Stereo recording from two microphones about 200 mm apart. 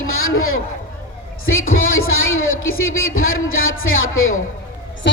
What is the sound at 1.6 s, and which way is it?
Speech, 90° left.